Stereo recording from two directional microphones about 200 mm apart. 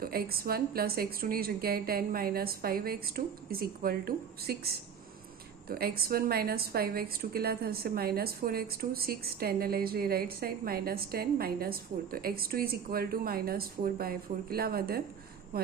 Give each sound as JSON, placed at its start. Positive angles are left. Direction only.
{"t": 0.0, "sound": "a woman's voice", "side_deg": -50}